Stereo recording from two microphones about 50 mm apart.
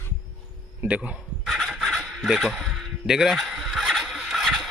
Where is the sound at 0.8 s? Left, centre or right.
Right.